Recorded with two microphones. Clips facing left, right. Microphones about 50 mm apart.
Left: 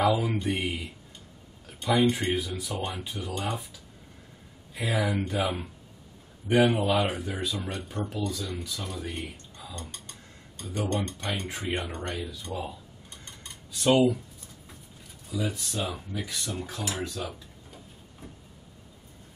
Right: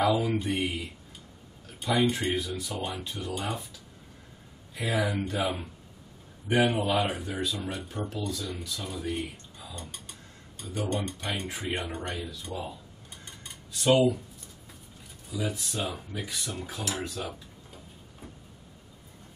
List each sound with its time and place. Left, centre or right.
0.0 s a sound: centre
0.4 s speech: centre
2.0 s speech: centre
3.3 s speech: centre
4.7 s speech: centre
9.8 s speech: centre
12.5 s speech: centre
13.2 s cutlery: centre
15.3 s speech: centre